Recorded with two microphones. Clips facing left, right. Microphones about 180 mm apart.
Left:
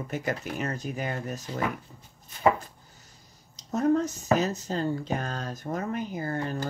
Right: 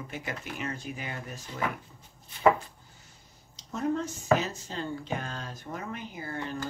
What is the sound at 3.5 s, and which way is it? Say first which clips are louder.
Speech: left 6 dB; 40° left (ahead or behind).